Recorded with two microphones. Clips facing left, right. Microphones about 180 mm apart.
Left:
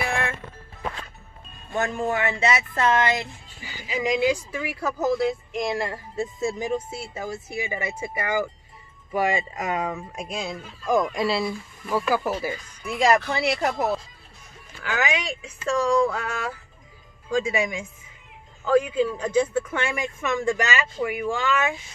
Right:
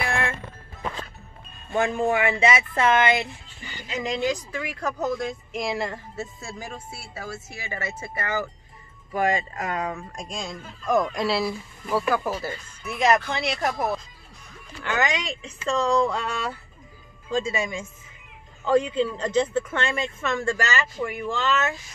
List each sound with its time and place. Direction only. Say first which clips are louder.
1.7 s speech: right 3 dB; 10° right (ahead or behind)
3.6 s speech: left 4 dB; 5° left (ahead or behind)
6.1 s speech: left 8 dB; 20° left (ahead or behind)
17.3 s speech: left 2 dB; 15° left (ahead or behind)